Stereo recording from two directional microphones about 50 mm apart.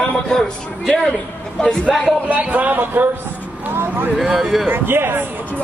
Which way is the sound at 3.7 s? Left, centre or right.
Right.